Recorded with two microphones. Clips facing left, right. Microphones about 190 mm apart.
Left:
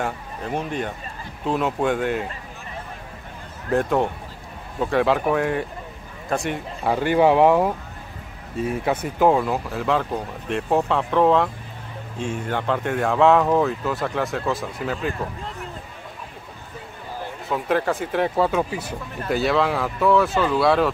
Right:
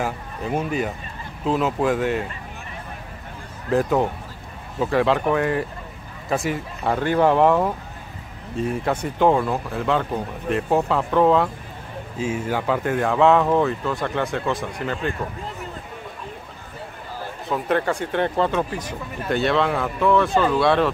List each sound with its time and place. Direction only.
0.0 s speech: 5° right (ahead or behind)
3.7 s speech: centre (ahead or behind)
17.5 s speech: centre (ahead or behind)